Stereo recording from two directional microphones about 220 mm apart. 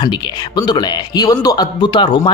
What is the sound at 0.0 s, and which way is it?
A man's voice, 20° left (ahead or behind).